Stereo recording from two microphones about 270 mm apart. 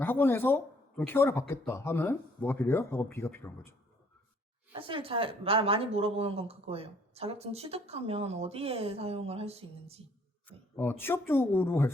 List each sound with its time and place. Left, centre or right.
0.0 s speech: centre
4.7 s a woman's voice: centre
10.8 s speech: centre